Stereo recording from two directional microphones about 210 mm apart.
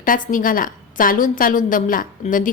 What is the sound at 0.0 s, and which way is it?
A woman's voice, 40° left (ahead or behind).